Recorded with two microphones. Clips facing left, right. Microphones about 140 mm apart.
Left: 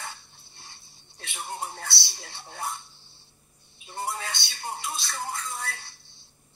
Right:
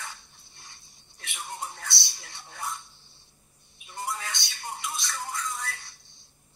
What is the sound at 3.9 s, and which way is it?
Speech, 30° left (ahead or behind).